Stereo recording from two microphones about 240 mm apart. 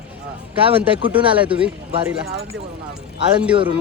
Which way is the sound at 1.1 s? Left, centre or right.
Centre.